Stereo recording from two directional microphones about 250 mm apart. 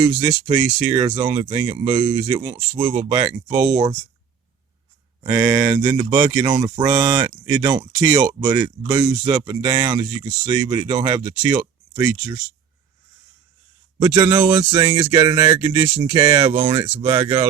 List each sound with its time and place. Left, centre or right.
0.3 s speech: centre
2.5 s speech: centre
3.0 s speech: right
3.3 s speech: centre
5.2 s speech: centre
14.1 s speech: centre
15.1 s speech: centre